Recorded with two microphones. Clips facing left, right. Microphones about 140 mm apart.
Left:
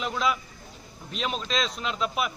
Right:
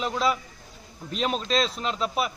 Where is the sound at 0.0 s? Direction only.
35° right (ahead or behind).